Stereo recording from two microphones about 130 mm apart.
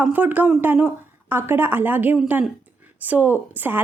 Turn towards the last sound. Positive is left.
turn(degrees=-15)  # may be behind; listen again after turning